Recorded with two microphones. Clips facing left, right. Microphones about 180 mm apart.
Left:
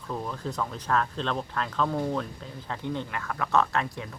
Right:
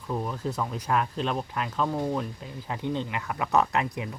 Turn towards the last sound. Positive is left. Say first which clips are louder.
# right 1 dB
turn(degrees=-15)  # may be behind; listen again after turning